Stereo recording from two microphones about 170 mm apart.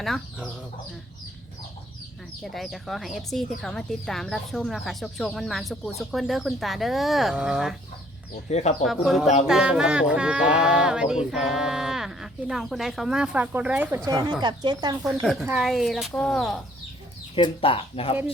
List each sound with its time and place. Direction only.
0.0 s speech: 5° right (ahead or behind)
2.4 s speech: centre (ahead or behind)
8.4 s speech: 40° left (ahead or behind)
8.8 s speech: centre (ahead or behind); by 14.9 s 25° right (ahead or behind)
15.1 s speech: centre (ahead or behind)
17.3 s speech: 30° left (ahead or behind)